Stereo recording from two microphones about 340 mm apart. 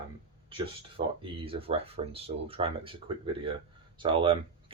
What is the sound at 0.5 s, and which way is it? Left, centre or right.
Speech, centre.